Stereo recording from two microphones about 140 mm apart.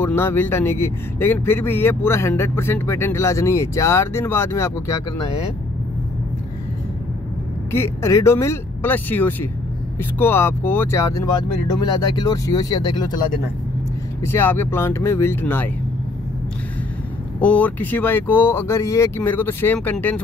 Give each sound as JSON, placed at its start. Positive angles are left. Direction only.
{"t": 0.0, "sound": "a man's voice", "side_deg": 15}
{"t": 7.7, "sound": "a man's voice", "side_deg": 20}
{"t": 14.2, "sound": "a man's voice", "side_deg": 15}
{"t": 17.4, "sound": "a man's voice", "side_deg": 10}